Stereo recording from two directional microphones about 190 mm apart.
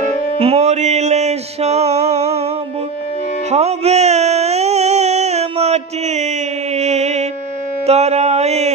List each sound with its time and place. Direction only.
0.4 s music: 35° right (ahead or behind)
3.4 s music: 35° right (ahead or behind)
7.8 s a sound: 35° right (ahead or behind)